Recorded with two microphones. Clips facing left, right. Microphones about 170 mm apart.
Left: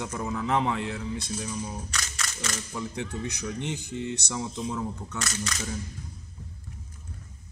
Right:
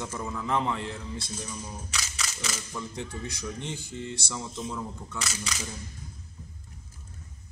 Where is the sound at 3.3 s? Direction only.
20° left (ahead or behind).